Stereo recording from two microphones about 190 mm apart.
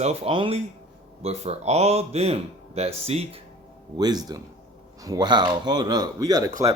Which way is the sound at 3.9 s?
20° right (ahead or behind).